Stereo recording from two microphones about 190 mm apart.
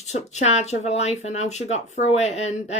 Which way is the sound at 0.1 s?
35° left (ahead or behind).